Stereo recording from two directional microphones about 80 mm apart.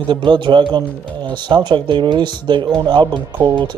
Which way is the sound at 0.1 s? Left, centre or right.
Right.